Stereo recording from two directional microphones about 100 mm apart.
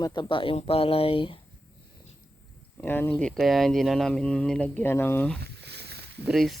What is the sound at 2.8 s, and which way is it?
Speech, 15° left (ahead or behind).